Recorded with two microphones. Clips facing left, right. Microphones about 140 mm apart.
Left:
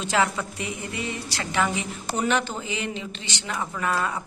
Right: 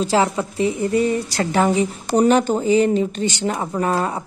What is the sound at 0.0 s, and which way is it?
A woman's voice, 35° right (ahead or behind).